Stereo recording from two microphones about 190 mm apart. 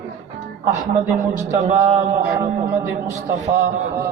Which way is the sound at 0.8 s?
40° right (ahead or behind).